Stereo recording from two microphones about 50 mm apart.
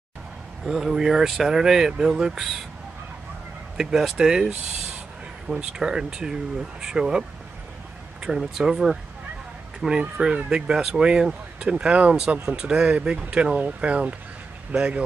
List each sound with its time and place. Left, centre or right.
0.7 s speech: centre
3.7 s speech: centre
5.6 s speech: centre